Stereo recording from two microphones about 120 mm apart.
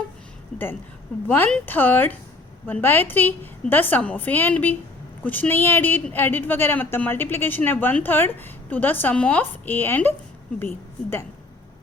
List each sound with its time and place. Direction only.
1.3 s a woman's voice: 15° left (ahead or behind)